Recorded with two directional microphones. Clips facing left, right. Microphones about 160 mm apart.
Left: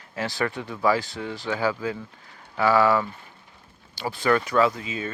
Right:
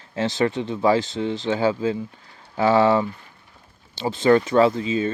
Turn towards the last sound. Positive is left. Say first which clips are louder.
# right 5 dB
turn(degrees=-30)  # may be behind; listen again after turning